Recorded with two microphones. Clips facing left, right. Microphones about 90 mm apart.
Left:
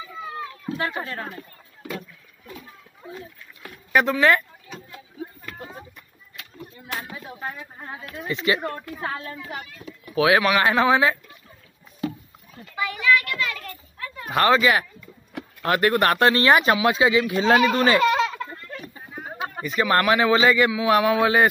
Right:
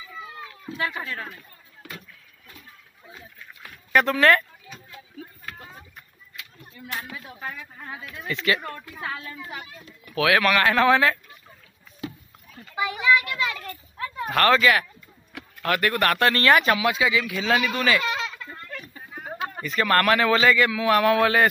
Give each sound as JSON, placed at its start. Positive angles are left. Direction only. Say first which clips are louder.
{"t": 0.7, "sound": "speech", "louder": "even", "side_deg": 35}
{"t": 3.1, "sound": "speech", "louder": "left 6 dB", "side_deg": 50}
{"t": 3.9, "sound": "speech", "louder": "even", "side_deg": 10}
{"t": 7.0, "sound": "speech", "louder": "left 3 dB", "side_deg": 25}
{"t": 9.0, "sound": "speech", "louder": "left 2 dB", "side_deg": 35}
{"t": 10.0, "sound": "speech", "louder": "left 2 dB", "side_deg": 25}
{"t": 12.7, "sound": "a sound", "louder": "even", "side_deg": -20}
{"t": 14.3, "sound": "speech", "louder": "left 1 dB", "side_deg": 20}
{"t": 17.7, "sound": "a sound", "louder": "left 5 dB", "side_deg": 35}
{"t": 18.5, "sound": "a sound", "louder": "left 1 dB", "side_deg": 25}
{"t": 19.6, "sound": "a man's voice", "louder": "left 1 dB", "side_deg": 15}